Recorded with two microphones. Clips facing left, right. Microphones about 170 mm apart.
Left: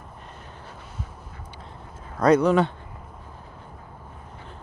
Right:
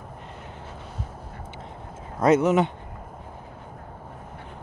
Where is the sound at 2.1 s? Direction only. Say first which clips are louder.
Left 1 dB; 20° right (ahead or behind).